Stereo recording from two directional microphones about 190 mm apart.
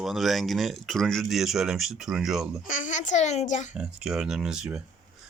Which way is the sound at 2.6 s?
45° left (ahead or behind).